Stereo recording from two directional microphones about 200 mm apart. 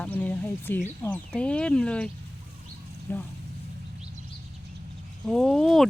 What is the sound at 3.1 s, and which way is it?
Speech, 10° left (ahead or behind).